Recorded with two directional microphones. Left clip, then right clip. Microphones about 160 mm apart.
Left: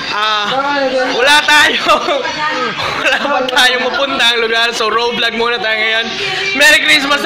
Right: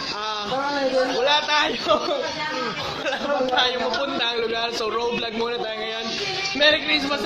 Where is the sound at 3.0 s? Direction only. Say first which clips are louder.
Left 9 dB; 10° left (ahead or behind).